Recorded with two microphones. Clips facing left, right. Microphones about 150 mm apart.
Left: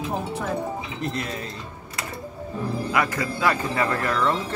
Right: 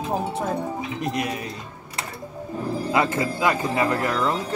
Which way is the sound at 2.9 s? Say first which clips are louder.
Right 4 dB; 25° right (ahead or behind).